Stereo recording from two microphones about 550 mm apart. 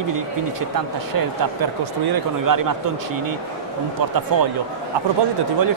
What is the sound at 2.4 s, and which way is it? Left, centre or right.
Speech, right.